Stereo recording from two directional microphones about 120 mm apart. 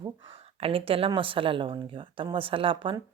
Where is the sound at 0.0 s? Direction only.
50° right (ahead or behind).